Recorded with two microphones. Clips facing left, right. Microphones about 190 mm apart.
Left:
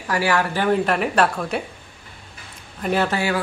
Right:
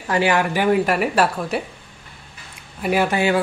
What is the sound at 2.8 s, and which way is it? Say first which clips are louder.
Speech: right 2 dB; 10° right (ahead or behind).